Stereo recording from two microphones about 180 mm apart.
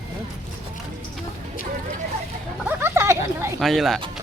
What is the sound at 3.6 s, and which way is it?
Speech, centre (ahead or behind).